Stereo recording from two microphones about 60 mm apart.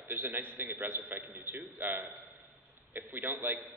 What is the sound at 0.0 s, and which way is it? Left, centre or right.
A man's voice, right.